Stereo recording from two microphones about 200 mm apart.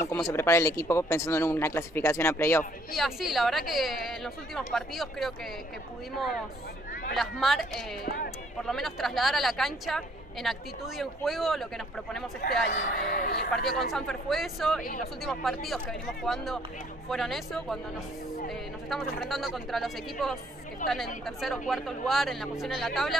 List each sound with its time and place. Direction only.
0.0 s speech: 15° left (ahead or behind)
3.0 s a woman's voice: centre (ahead or behind)
7.2 s a woman's voice: centre (ahead or behind)
8.0 s speech: 45° left (ahead or behind)
8.6 s a woman's voice: centre (ahead or behind)
12.4 s speech: 50° left (ahead or behind)
13.7 s a woman's voice: centre (ahead or behind)
18.9 s a woman's voice: centre (ahead or behind)